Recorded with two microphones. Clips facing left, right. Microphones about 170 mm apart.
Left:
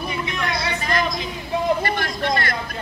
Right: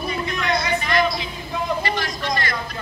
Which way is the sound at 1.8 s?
55° left (ahead or behind).